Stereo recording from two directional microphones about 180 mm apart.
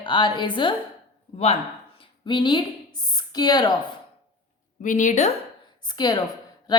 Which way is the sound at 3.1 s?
25° left (ahead or behind).